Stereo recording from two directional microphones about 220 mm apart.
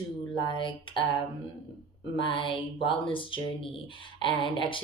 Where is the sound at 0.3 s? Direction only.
20° left (ahead or behind).